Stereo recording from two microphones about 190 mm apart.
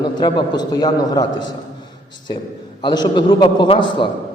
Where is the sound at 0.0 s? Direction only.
25° left (ahead or behind).